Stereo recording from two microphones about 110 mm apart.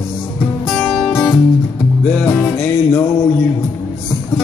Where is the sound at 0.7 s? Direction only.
5° left (ahead or behind); by 3.4 s 20° left (ahead or behind).